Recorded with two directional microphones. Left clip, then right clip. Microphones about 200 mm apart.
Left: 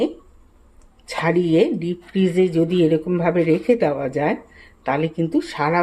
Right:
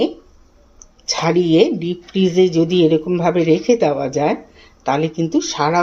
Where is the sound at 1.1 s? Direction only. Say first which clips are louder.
Right 3 dB; centre (ahead or behind).